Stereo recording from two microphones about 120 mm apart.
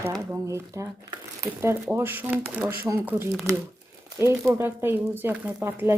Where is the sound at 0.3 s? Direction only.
25° right (ahead or behind).